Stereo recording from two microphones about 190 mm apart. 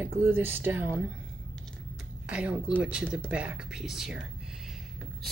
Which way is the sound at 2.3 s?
5° right (ahead or behind).